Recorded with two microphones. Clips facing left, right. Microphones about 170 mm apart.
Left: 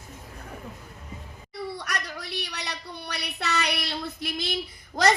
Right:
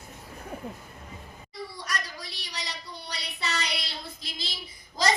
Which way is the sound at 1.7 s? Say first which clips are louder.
Left 2 dB; 60° left (ahead or behind).